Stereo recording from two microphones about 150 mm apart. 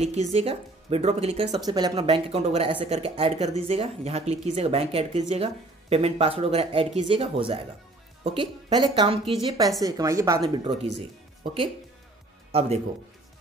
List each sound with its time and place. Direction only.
0.0 s speech: 45° right (ahead or behind)
1.7 s a woman's voice: 25° right (ahead or behind)
2.0 s speech: 40° right (ahead or behind)
9.8 s a woman's voice: 25° right (ahead or behind)
10.5 s speech: 35° right (ahead or behind)
12.5 s speech: 45° right (ahead or behind)